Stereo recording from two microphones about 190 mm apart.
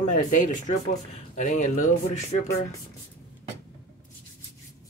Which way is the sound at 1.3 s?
40° left (ahead or behind).